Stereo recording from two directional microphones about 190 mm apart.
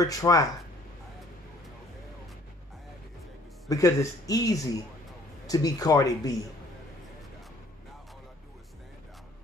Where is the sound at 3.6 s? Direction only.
15° left (ahead or behind).